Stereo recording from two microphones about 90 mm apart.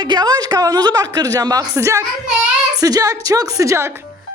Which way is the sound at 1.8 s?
30° right (ahead or behind).